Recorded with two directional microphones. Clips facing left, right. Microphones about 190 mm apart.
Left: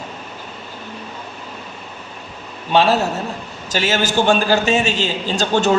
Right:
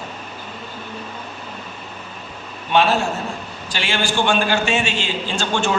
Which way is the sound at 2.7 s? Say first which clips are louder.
Left 2 dB; 35° left (ahead or behind).